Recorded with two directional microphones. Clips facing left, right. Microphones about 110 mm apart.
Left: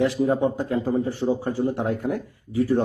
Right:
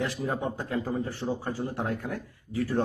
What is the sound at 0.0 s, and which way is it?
A man's voice, 20° left (ahead or behind).